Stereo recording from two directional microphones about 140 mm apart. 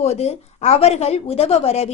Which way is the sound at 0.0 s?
50° left (ahead or behind).